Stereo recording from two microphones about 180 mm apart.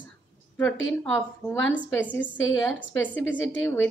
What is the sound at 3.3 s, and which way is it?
Speech, 90° left.